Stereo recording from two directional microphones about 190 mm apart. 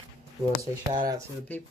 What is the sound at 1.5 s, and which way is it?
Speech, 10° left (ahead or behind).